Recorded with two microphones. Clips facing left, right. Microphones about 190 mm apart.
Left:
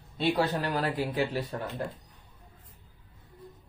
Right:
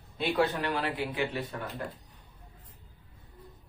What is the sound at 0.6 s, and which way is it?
Speech, 40° left (ahead or behind).